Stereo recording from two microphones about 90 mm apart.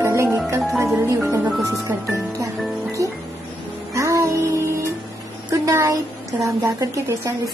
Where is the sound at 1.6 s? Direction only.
35° right (ahead or behind).